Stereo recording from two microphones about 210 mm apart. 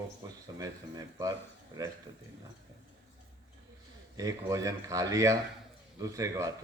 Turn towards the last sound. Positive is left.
turn(degrees=-15)  # may be behind; listen again after turning